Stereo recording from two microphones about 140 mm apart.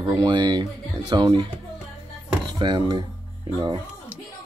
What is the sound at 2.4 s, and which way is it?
Speech, 30° right (ahead or behind).